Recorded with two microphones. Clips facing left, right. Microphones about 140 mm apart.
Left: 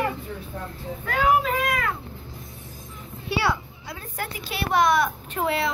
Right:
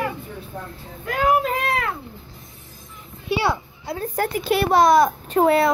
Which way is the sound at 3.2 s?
20° right (ahead or behind).